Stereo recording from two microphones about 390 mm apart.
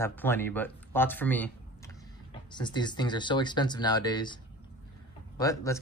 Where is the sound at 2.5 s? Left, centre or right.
Centre.